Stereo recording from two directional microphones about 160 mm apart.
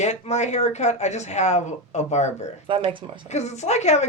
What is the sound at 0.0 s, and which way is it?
Speech, 45° left (ahead or behind).